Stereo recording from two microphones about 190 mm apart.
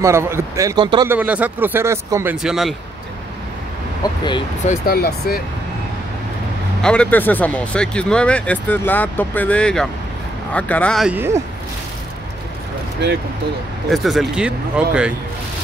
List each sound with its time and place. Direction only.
0.0 s speech: 15° right (ahead or behind)
1.0 s speech: 10° right (ahead or behind)
2.3 s speech: centre (ahead or behind)
4.0 s speech: 20° left (ahead or behind)
4.6 s speech: 50° left (ahead or behind)
6.8 s speech: 5° left (ahead or behind)
13.8 s speech: centre (ahead or behind)